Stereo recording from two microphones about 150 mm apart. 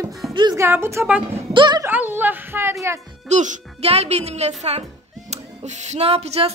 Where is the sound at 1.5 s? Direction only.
30° right (ahead or behind).